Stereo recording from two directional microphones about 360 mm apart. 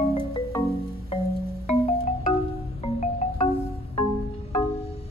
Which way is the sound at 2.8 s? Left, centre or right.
Centre.